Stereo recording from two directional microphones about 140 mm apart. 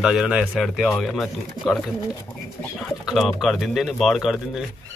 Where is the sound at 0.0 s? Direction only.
5° right (ahead or behind).